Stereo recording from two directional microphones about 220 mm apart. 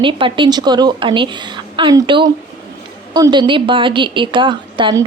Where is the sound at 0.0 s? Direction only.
25° right (ahead or behind).